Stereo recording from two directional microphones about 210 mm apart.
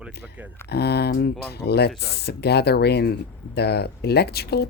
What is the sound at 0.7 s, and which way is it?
Speech, 50° left (ahead or behind).